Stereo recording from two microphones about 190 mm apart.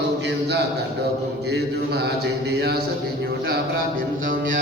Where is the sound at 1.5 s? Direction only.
60° right (ahead or behind).